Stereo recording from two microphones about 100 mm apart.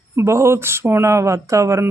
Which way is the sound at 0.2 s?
25° right (ahead or behind).